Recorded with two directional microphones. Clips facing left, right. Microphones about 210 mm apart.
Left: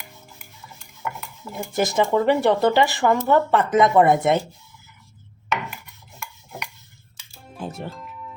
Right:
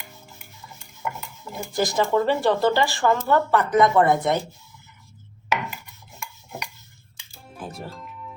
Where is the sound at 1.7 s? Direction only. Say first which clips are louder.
Left 1 dB; 25° left (ahead or behind).